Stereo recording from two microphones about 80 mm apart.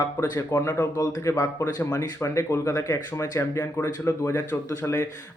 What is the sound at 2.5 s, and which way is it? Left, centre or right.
Speech, left.